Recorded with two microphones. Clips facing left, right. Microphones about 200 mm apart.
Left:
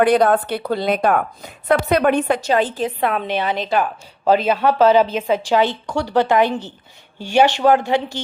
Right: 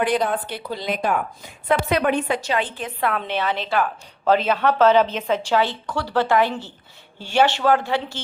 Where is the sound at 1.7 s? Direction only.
45° left (ahead or behind).